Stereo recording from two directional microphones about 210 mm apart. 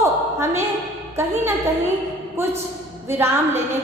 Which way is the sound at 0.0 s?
15° right (ahead or behind).